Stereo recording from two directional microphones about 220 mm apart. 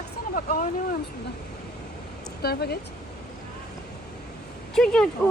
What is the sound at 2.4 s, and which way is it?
Speech, 45° left (ahead or behind).